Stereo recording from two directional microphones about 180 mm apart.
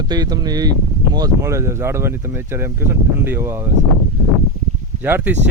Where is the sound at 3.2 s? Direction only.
10° right (ahead or behind).